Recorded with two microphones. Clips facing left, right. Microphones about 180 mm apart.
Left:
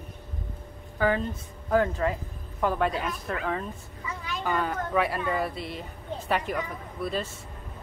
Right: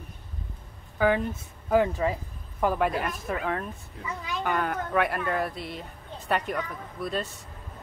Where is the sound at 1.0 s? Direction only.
10° right (ahead or behind).